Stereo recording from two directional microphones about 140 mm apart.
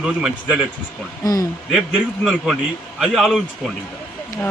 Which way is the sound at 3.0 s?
Centre (ahead or behind).